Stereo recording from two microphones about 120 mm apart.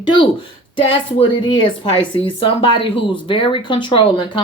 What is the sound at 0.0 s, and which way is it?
Speech, 45° left (ahead or behind).